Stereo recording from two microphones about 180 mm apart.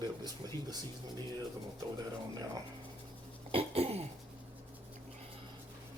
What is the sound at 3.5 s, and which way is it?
Cough, 35° right (ahead or behind).